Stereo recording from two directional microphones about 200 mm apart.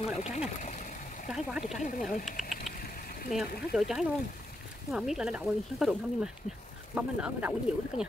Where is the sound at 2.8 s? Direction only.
50° left (ahead or behind).